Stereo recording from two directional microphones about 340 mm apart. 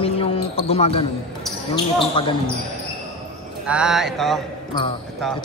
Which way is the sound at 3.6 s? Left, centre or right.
Centre.